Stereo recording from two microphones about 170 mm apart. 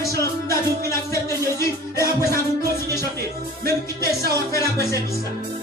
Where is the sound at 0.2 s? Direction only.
15° left (ahead or behind).